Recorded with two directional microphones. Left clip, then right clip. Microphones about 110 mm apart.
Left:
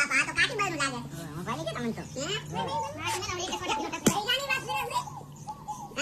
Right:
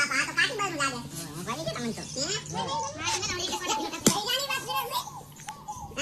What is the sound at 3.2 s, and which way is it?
Speech, 45° left (ahead or behind).